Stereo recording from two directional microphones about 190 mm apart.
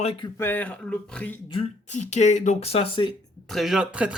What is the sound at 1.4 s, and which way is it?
Speech, 25° left (ahead or behind).